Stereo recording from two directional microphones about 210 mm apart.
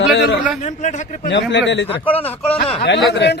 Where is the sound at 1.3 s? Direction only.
55° left (ahead or behind).